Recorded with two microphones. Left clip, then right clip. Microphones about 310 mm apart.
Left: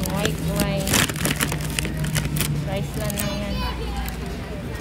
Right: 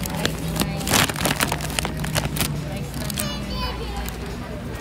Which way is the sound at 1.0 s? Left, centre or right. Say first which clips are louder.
Right 2 dB; centre.